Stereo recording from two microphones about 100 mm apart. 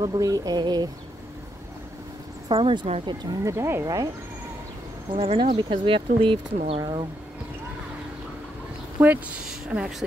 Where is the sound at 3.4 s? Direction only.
25° right (ahead or behind).